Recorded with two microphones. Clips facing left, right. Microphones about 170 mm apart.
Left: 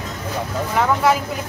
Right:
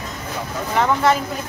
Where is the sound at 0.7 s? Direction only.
5° left (ahead or behind).